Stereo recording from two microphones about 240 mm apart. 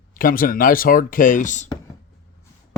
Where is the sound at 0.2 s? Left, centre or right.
Left.